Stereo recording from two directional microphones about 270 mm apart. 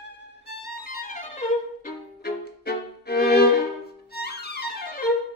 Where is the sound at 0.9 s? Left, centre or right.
Left.